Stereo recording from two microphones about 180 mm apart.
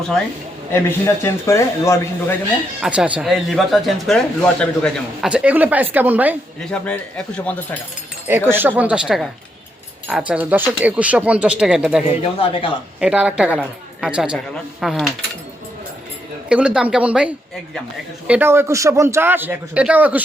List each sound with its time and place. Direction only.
0.7 s a man's voice: 15° left (ahead or behind)
2.8 s a woman's voice: 5° right (ahead or behind)
5.3 s a man's voice: 10° right (ahead or behind)
6.7 s a man's voice: 5° left (ahead or behind)
8.3 s a man's voice: 10° right (ahead or behind)
12.2 s speech: 30° left (ahead or behind)
13.0 s a woman's voice: 5° right (ahead or behind)
16.5 s a man's voice: 5° right (ahead or behind)